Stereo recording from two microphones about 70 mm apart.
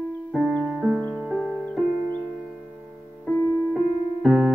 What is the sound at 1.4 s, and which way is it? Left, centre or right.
Music, centre.